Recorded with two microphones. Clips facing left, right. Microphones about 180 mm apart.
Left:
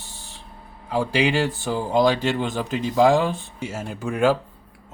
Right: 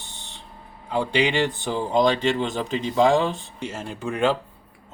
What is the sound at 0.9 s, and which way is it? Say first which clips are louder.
Speech: left 1 dB; 5° left (ahead or behind).